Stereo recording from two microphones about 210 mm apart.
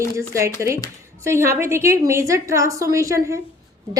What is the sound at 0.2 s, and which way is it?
A woman's voice, 15° right (ahead or behind).